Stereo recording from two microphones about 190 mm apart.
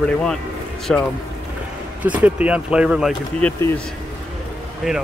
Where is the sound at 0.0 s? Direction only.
5° left (ahead or behind).